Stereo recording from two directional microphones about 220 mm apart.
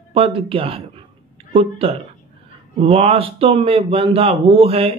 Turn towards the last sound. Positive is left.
turn(degrees=-25)  # may be behind; listen again after turning